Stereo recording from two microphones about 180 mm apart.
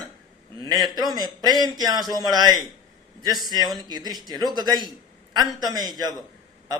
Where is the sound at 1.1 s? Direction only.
20° right (ahead or behind).